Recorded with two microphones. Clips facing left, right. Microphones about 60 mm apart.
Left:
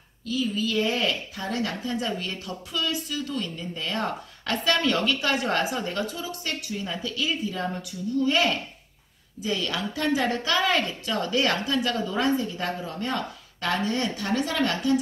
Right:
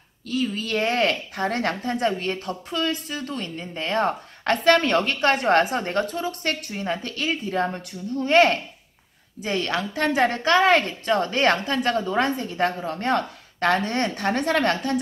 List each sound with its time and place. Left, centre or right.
0.3 s a woman's voice: right